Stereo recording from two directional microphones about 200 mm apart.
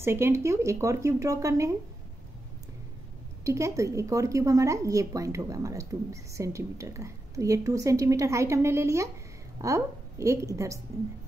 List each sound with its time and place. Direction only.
0.0 s a woman's voice: 10° right (ahead or behind)
3.4 s a woman's voice: 15° right (ahead or behind)